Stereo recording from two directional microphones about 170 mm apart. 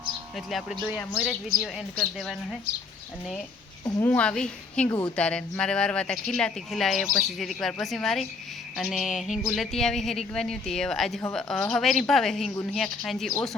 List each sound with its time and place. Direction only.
0.3 s speech: centre (ahead or behind)
3.8 s speech: 20° left (ahead or behind)
4.1 s speech: 5° left (ahead or behind)
4.9 s speech: 20° left (ahead or behind)
5.1 s speech: 5° left (ahead or behind)